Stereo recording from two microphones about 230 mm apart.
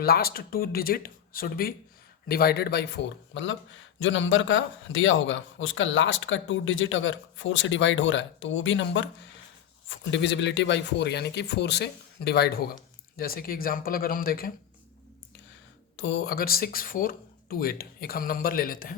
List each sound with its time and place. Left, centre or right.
0.0 s speech: left
16.0 s speech: left